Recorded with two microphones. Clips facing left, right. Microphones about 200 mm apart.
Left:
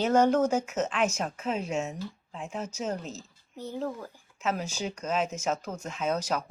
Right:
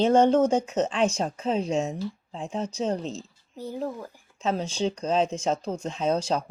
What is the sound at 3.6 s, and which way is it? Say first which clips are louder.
Speech: right 2 dB; 10° right (ahead or behind).